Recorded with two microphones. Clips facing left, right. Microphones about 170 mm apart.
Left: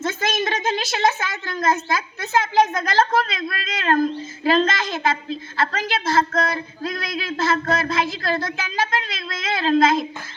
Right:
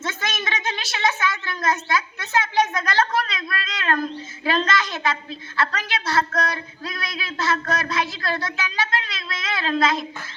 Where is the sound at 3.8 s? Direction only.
45° left (ahead or behind).